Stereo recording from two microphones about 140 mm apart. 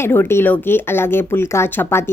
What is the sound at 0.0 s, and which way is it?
A woman's voice, 15° left (ahead or behind).